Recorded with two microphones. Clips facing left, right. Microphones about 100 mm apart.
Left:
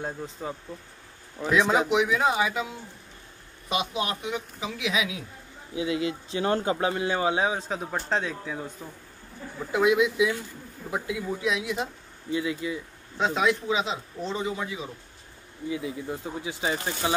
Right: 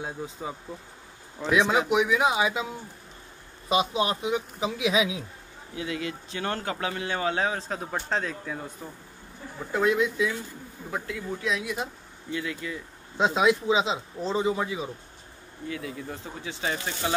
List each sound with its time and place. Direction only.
0.0 s speech: 5° right (ahead or behind)
2.2 s speech: 20° right (ahead or behind)
3.6 s speech: 30° right (ahead or behind)
5.8 s speech: 20° left (ahead or behind); by 8.6 s centre (ahead or behind)
9.7 s speech: 5° left (ahead or behind)
12.3 s speech: 20° left (ahead or behind)
13.2 s speech: 20° right (ahead or behind)
15.7 s speech: 15° left (ahead or behind)